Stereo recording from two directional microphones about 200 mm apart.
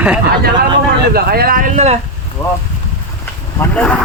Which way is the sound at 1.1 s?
50° right (ahead or behind).